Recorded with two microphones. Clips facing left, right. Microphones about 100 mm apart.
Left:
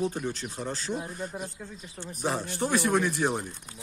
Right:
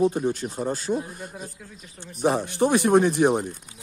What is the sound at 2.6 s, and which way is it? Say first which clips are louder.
Speech: right 7 dB; 20° right (ahead or behind).